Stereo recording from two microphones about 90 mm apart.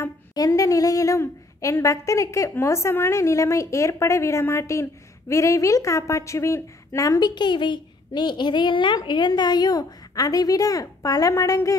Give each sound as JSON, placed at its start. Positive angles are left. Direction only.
{"t": 0.3, "sound": "a woman's voice", "side_deg": 40}
{"t": 7.2, "sound": "a woman's voice", "side_deg": 55}